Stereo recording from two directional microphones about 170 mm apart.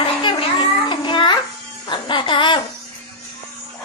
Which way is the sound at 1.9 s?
30° left (ahead or behind).